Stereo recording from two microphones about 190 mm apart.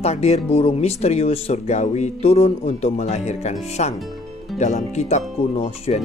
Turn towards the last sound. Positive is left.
turn(degrees=35)  # may be behind; listen again after turning